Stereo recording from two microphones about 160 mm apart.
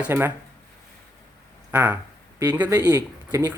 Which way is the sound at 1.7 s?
10° right (ahead or behind).